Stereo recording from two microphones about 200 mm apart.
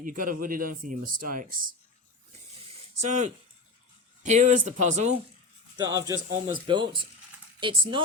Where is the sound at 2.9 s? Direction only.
35° right (ahead or behind).